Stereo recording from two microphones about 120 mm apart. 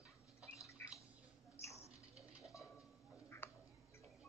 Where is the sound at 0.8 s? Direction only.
20° left (ahead or behind).